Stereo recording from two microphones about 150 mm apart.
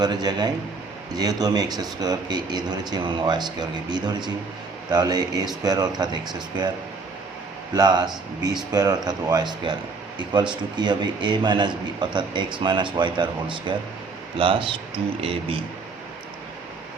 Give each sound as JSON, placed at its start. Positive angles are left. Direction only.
{"t": 0.0, "sound": "speech", "side_deg": -25}
{"t": 7.7, "sound": "a man's voice", "side_deg": -25}